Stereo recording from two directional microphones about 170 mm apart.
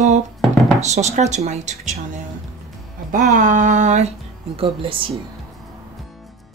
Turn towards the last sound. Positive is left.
turn(degrees=-30)  # may be behind; listen again after turning